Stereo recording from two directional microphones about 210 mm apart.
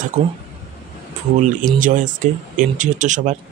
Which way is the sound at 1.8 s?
40° right (ahead or behind).